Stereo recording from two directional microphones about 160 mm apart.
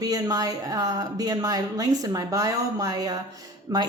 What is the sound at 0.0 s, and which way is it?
A woman's voice, 25° right (ahead or behind).